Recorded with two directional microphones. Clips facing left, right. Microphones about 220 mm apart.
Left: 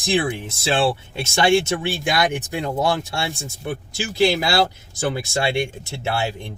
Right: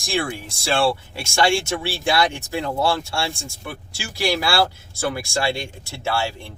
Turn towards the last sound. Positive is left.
turn(degrees=20)  # may be behind; listen again after turning